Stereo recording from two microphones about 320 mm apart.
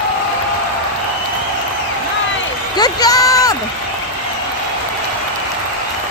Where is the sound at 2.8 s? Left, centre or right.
Centre.